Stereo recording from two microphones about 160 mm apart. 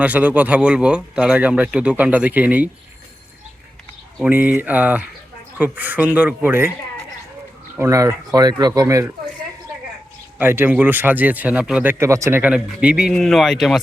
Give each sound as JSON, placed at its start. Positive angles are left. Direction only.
{"t": 0.0, "sound": "speech", "side_deg": -10}
{"t": 4.2, "sound": "speech", "side_deg": -10}
{"t": 7.8, "sound": "speech", "side_deg": -20}
{"t": 10.3, "sound": "speech", "side_deg": -10}